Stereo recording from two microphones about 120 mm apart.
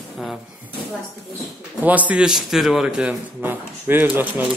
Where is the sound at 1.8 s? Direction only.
15° right (ahead or behind).